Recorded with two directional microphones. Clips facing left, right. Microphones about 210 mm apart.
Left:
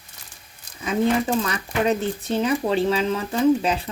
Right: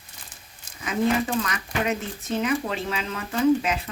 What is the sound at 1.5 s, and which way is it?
A woman's voice, 35° left (ahead or behind).